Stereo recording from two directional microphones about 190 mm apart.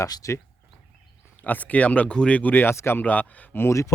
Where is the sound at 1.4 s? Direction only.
10° left (ahead or behind).